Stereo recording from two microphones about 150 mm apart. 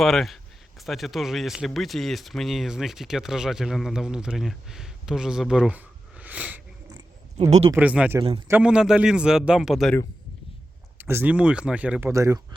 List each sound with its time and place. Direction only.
0.0 s speech: centre (ahead or behind)
7.3 s speech: 45° right (ahead or behind)
7.8 s speech: 10° right (ahead or behind)
10.9 s speech: 15° right (ahead or behind)